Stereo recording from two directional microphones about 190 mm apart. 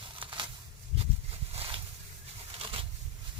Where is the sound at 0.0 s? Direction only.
25° right (ahead or behind).